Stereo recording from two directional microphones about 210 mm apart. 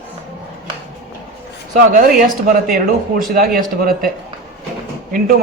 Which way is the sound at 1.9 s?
40° right (ahead or behind).